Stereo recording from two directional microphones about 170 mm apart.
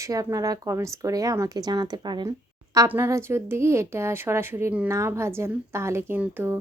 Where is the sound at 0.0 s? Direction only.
20° right (ahead or behind).